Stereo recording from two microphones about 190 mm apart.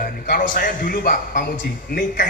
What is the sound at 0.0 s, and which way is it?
A man's voice, 45° left (ahead or behind).